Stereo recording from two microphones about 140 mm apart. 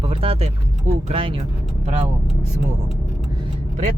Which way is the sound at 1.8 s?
55° right (ahead or behind).